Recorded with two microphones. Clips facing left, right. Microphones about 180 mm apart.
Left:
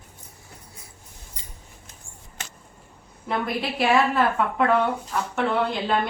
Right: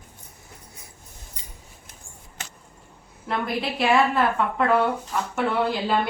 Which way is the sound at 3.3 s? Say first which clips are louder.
Even; centre (ahead or behind).